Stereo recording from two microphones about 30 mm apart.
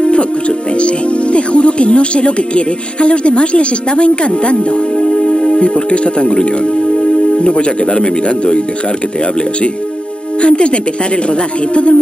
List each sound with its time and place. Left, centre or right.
0.0 s speech: left
4.9 s speech: left
10.4 s speech: left